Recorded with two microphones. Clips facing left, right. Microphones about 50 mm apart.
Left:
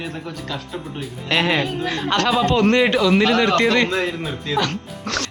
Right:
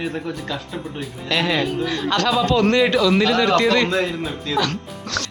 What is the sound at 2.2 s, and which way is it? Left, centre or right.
A man's voice, centre.